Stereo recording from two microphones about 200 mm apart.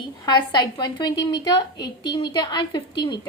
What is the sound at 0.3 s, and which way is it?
A woman's voice, 20° left (ahead or behind).